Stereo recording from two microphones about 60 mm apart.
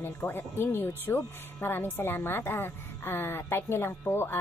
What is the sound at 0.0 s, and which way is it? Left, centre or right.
Speech, left.